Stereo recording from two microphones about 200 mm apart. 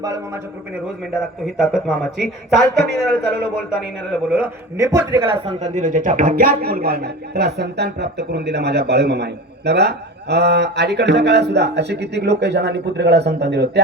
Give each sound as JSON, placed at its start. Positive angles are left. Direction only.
{"t": 1.1, "sound": "speech", "side_deg": -5}
{"t": 4.1, "sound": "a man's voice", "side_deg": -10}
{"t": 5.5, "sound": "speech", "side_deg": -35}